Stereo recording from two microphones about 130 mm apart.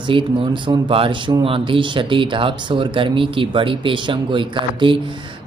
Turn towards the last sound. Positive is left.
turn(degrees=-40)  # may be behind; listen again after turning